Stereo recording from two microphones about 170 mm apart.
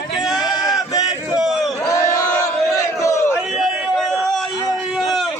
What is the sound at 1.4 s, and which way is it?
Crowd, centre (ahead or behind).